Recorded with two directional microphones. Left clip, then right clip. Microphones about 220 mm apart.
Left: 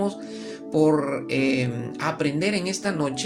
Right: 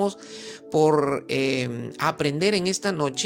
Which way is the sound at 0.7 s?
40° right (ahead or behind).